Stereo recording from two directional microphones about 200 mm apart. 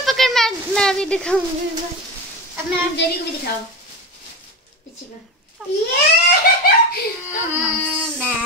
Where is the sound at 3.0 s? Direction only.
60° left (ahead or behind).